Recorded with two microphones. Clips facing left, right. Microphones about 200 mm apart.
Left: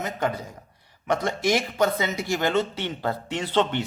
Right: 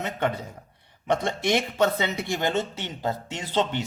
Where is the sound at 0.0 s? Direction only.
30° right (ahead or behind).